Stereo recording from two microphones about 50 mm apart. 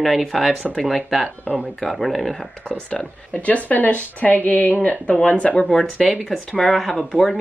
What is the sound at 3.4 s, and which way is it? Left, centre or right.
A woman's voice, left.